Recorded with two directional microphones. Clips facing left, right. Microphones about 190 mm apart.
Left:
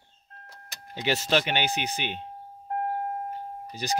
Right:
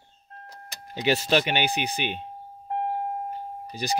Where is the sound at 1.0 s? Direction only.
15° right (ahead or behind).